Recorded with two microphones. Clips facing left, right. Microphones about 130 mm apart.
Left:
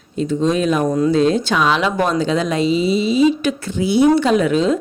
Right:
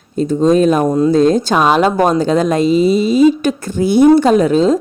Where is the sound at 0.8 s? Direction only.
30° right (ahead or behind).